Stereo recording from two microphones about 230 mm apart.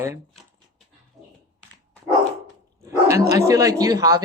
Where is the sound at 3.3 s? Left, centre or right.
Centre.